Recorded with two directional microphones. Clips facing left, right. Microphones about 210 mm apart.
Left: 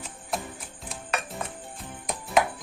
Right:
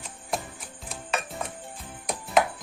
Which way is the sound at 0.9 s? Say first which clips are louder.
Right 1 dB; centre (ahead or behind).